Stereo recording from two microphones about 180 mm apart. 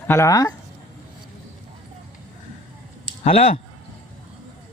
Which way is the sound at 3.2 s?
40° left (ahead or behind).